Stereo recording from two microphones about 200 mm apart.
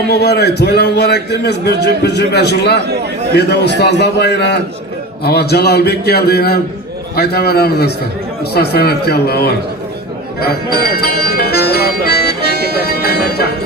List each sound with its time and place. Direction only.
0.1 s a man's voice: 55° left (ahead or behind)
10.4 s music: 50° left (ahead or behind)